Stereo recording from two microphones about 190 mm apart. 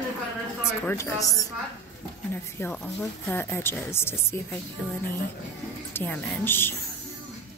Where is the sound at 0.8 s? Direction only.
15° left (ahead or behind).